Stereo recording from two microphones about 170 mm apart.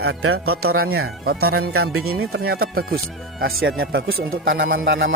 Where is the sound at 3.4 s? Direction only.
75° right (ahead or behind).